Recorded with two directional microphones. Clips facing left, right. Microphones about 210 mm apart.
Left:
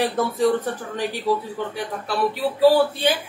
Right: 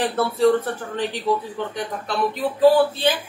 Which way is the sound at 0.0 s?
15° left (ahead or behind).